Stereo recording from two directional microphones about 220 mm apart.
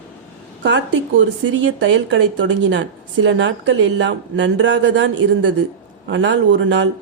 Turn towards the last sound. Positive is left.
turn(degrees=-55)  # may be behind; listen again after turning